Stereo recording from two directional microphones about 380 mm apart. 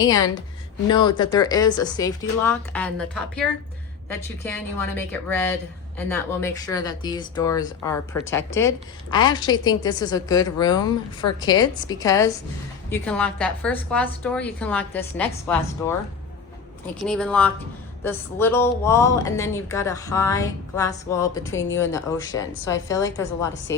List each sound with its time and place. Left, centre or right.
0.1 s a woman's voice: centre
21.5 s speech: left
22.6 s speech: centre